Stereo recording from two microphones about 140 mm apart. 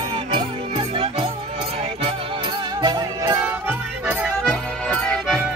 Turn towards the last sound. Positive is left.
turn(degrees=5)  # may be behind; listen again after turning